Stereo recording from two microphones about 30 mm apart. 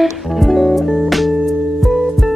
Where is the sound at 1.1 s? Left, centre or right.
Centre.